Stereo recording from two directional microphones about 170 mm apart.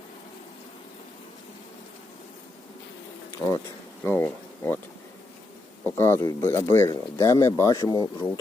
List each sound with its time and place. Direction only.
3.4 s speech: 10° left (ahead or behind)
6.0 s speech: 15° left (ahead or behind)